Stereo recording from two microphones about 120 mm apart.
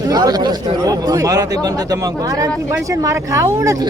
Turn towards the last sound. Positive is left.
turn(degrees=-25)  # may be behind; listen again after turning